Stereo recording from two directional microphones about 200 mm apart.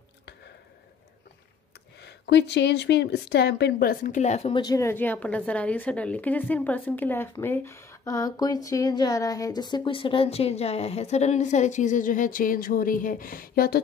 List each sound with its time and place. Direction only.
2.0 s a woman's voice: 60° left (ahead or behind); by 4.6 s 35° left (ahead or behind)
4.6 s a woman's voice: 15° left (ahead or behind); by 13.7 s 45° left (ahead or behind)